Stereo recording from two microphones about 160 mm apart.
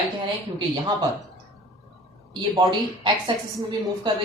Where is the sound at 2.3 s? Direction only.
30° right (ahead or behind).